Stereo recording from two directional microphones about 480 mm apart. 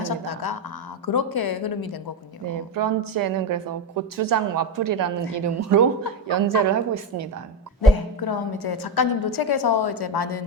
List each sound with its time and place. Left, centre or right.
0.0 s a woman's voice: left
2.5 s a woman's voice: right
7.8 s a woman's voice: left